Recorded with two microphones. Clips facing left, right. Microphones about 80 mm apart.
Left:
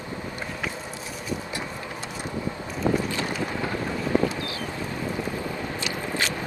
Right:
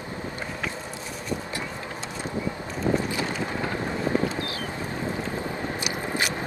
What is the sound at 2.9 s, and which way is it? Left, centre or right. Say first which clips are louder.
Boat: even; centre.